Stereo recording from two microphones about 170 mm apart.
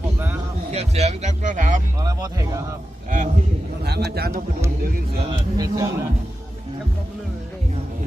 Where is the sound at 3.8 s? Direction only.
70° right (ahead or behind).